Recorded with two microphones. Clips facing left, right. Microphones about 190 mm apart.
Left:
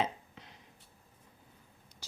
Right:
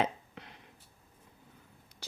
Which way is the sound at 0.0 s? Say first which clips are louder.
Right 2 dB; 65° right (ahead or behind).